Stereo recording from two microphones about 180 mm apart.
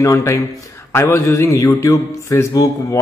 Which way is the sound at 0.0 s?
15° left (ahead or behind).